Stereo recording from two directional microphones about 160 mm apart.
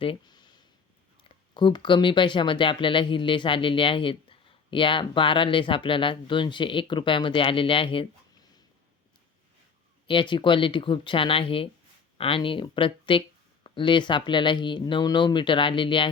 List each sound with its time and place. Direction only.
0.0 s a sound: 30° left (ahead or behind)
1.5 s speech: 30° left (ahead or behind)
10.1 s speech: 30° left (ahead or behind)